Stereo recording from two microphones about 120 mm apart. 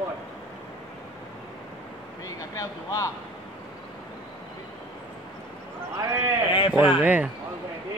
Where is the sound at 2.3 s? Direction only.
30° left (ahead or behind).